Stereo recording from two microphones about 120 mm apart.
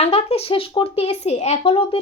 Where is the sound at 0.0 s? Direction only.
55° left (ahead or behind).